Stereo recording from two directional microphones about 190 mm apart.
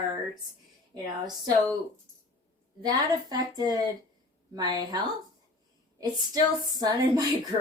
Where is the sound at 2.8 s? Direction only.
20° right (ahead or behind).